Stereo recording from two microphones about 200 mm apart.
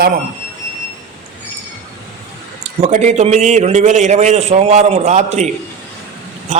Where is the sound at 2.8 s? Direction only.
35° right (ahead or behind).